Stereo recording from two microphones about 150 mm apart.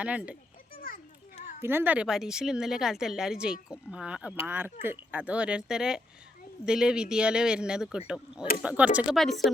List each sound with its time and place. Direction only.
0.0 s speech: 10° right (ahead or behind)
0.7 s children playing: 70° left (ahead or behind)
1.6 s speech: 15° right (ahead or behind)